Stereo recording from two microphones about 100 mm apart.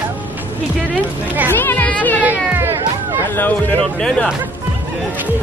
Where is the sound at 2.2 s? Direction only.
15° right (ahead or behind).